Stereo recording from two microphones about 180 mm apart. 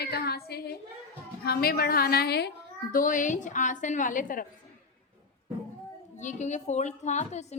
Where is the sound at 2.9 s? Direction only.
45° left (ahead or behind).